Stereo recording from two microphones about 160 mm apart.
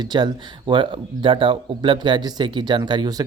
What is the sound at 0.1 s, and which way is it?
Speech, 30° right (ahead or behind).